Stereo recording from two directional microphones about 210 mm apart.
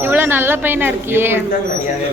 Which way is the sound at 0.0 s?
10° right (ahead or behind).